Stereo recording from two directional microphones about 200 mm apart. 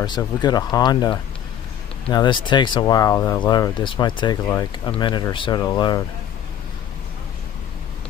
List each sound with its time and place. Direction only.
0.0 s speech: 20° left (ahead or behind)